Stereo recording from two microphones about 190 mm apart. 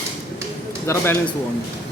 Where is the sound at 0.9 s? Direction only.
15° left (ahead or behind).